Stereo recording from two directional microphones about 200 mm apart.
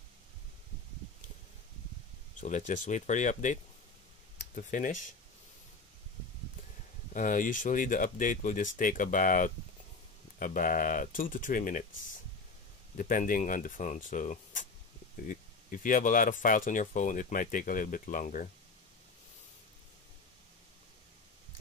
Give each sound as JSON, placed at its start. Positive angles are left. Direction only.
{"t": 2.4, "sound": "speech", "side_deg": 40}
{"t": 4.6, "sound": "speech", "side_deg": 40}
{"t": 7.2, "sound": "speech", "side_deg": 40}
{"t": 12.9, "sound": "speech", "side_deg": 40}